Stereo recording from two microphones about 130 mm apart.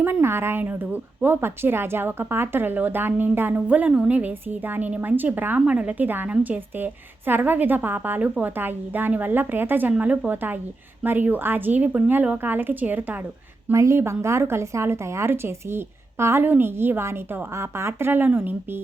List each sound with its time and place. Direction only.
0.0 s a woman's voice: 20° right (ahead or behind)